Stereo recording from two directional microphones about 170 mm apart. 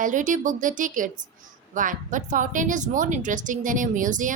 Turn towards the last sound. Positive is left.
turn(degrees=-50)  # may be behind; listen again after turning